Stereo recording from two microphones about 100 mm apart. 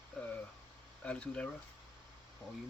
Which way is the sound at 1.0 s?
10° left (ahead or behind).